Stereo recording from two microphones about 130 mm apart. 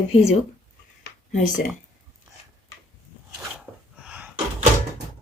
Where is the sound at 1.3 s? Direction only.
80° left.